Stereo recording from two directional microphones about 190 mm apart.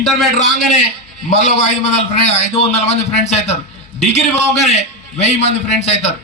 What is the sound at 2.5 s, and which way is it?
A man's voice, 35° left (ahead or behind).